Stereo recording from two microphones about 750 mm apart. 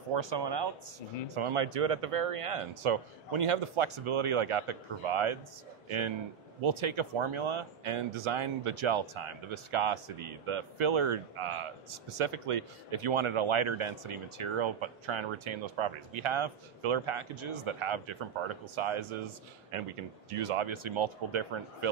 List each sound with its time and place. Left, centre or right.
0.1 s speech: right